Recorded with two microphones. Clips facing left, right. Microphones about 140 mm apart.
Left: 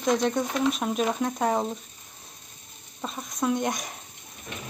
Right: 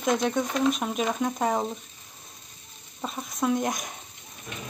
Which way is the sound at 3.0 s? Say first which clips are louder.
Right 1 dB; centre (ahead or behind).